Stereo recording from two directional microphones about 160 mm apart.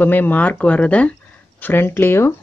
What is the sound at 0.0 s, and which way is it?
Speech, 10° left (ahead or behind).